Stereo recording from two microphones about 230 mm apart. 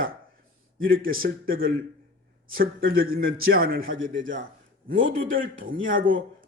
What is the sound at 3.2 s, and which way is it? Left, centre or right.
Speech, right.